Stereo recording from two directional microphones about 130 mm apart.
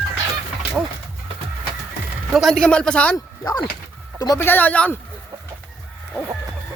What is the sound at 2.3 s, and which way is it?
Speech, 5° left (ahead or behind).